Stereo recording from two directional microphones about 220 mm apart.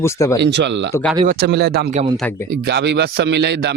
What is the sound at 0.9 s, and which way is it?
Speech, 5° left (ahead or behind).